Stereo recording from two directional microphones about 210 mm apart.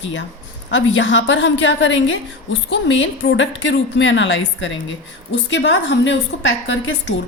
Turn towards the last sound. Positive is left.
turn(degrees=65)  # may be behind; listen again after turning